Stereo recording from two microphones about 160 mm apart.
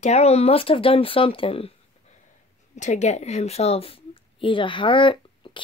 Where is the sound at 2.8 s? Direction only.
45° left (ahead or behind).